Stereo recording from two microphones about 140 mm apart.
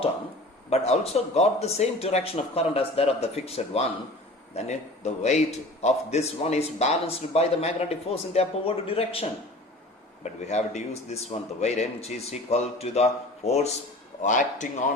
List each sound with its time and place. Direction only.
0.7 s a man's voice: 50° left (ahead or behind)
10.4 s a man's voice: 55° left (ahead or behind)
14.2 s speech: 65° left (ahead or behind)